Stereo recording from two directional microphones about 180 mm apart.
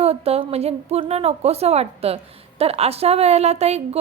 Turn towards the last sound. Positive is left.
turn(degrees=-35)  # may be behind; listen again after turning